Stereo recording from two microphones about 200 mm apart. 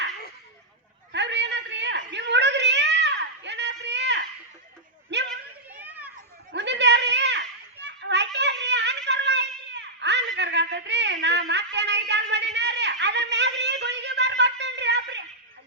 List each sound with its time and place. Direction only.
1.1 s a sound: 60° right (ahead or behind)
5.7 s children playing: 10° right (ahead or behind)
6.5 s children playing: 60° right (ahead or behind)